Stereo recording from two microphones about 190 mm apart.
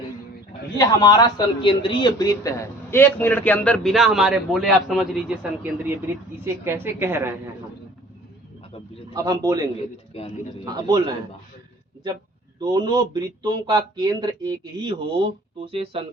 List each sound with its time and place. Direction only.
0.8 s a man's voice: 20° left (ahead or behind); by 7.3 s 10° right (ahead or behind)
9.1 s speech: 20° right (ahead or behind)
10.1 s a man's voice: 30° left (ahead or behind)
10.7 s speech: 20° right (ahead or behind)
12.5 s speech: 20° right (ahead or behind)
15.5 s speech: 30° right (ahead or behind)